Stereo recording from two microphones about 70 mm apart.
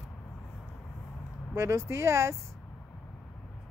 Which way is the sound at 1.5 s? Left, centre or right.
Right.